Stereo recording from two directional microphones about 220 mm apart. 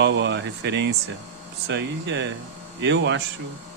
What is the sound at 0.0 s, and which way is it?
Speech, 55° right (ahead or behind).